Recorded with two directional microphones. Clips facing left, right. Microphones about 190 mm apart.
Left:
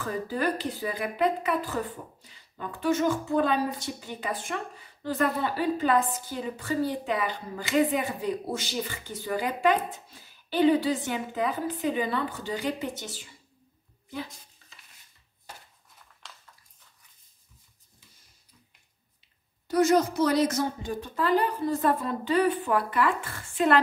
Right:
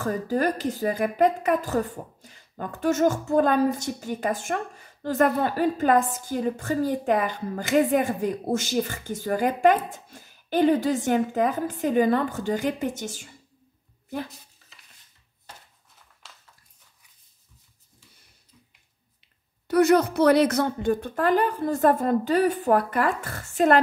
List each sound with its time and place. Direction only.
0.0 s a woman's voice: 45° right (ahead or behind)
19.7 s a woman's voice: 60° right (ahead or behind); by 23.8 s 45° right (ahead or behind)